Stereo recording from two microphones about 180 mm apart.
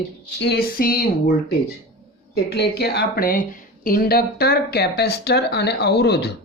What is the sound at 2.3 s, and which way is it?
Speech, 65° left (ahead or behind).